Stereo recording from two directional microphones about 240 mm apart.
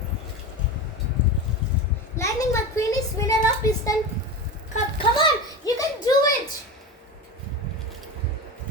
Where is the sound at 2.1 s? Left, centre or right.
Centre.